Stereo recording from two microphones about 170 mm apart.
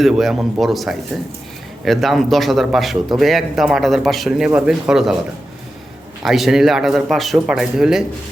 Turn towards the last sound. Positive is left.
turn(degrees=-5)  # may be behind; listen again after turning